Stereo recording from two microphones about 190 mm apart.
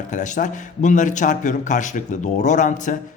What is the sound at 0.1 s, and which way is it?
Speech, 40° left (ahead or behind).